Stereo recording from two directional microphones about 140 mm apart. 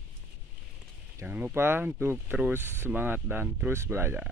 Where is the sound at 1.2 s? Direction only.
10° right (ahead or behind).